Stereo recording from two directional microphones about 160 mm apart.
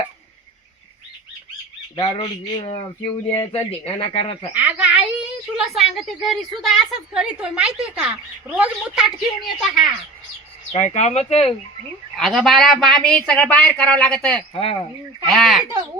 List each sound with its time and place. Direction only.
2.0 s speech: 30° left (ahead or behind)
4.5 s a woman's voice: 10° right (ahead or behind)
10.7 s speech: 45° left (ahead or behind)
12.1 s a woman's voice: centre (ahead or behind)
14.5 s speech: 35° left (ahead or behind)
15.3 s a woman's voice: centre (ahead or behind)